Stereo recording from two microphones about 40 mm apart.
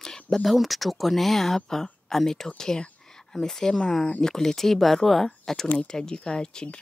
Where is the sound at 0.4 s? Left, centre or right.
Centre.